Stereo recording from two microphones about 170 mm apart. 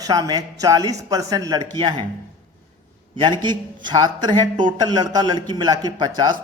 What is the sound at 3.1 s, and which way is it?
Speech, 25° right (ahead or behind).